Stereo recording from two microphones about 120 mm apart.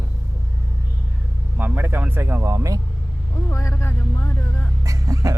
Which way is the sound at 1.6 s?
15° right (ahead or behind).